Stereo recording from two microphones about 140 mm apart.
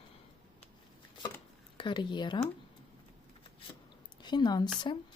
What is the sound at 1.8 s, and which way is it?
Speech, 35° left (ahead or behind).